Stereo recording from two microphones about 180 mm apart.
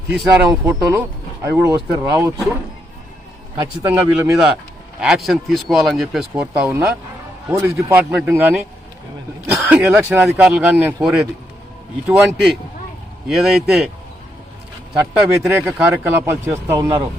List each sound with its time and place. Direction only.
0.3 s speech: 15° right (ahead or behind)
3.5 s speech: 15° right (ahead or behind)
4.9 s speech: centre (ahead or behind)
9.6 s speech: 5° right (ahead or behind)
15.1 s speech: centre (ahead or behind)
15.4 s speech: 15° right (ahead or behind)